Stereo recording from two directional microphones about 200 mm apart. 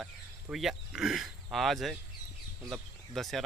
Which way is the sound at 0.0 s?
Centre (ahead or behind).